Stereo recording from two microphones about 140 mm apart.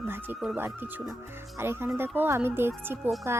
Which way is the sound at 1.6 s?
15° right (ahead or behind).